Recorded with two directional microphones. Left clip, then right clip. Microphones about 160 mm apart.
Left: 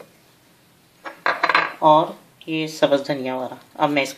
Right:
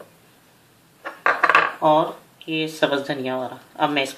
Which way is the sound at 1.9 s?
50° left (ahead or behind).